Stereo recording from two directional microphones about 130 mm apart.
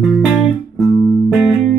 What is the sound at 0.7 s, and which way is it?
Music, centre (ahead or behind).